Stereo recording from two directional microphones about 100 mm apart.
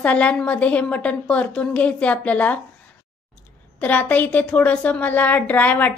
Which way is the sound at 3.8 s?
15° left (ahead or behind).